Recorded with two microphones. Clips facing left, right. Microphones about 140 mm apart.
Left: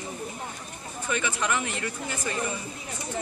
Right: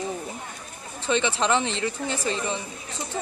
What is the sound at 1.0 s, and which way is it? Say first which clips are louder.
Speech: right 5 dB; 25° right (ahead or behind).